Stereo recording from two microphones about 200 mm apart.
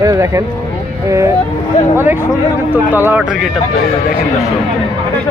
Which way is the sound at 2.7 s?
10° right (ahead or behind).